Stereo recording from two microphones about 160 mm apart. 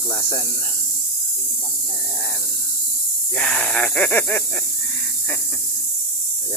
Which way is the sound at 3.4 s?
5° left (ahead or behind).